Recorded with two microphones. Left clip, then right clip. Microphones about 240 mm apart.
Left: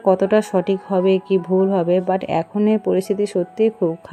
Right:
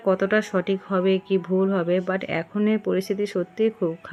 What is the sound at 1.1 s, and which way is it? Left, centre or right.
Speech, left.